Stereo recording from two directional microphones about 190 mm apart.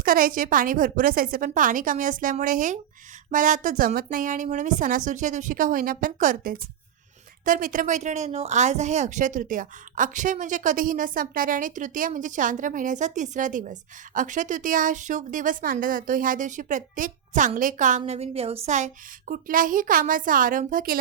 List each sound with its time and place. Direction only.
0.0 s speech: 50° right (ahead or behind)